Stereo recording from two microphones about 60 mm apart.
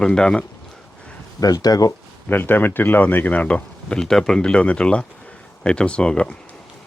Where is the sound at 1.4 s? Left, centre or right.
Left.